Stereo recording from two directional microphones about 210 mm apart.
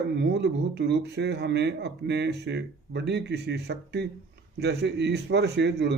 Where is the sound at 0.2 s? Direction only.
55° right (ahead or behind).